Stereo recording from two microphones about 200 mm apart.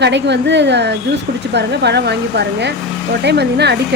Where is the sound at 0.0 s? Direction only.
60° right (ahead or behind).